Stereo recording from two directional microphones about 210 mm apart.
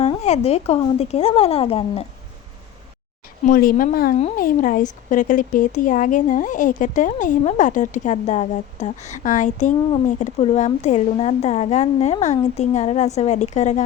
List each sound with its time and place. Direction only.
0.0 s a woman's voice: 30° left (ahead or behind)
3.4 s speech: 40° left (ahead or behind)